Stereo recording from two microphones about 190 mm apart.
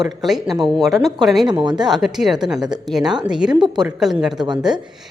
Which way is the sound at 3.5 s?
20° right (ahead or behind).